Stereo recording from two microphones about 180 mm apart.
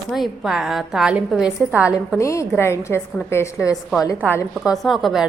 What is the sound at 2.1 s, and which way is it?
A woman's voice, 15° left (ahead or behind).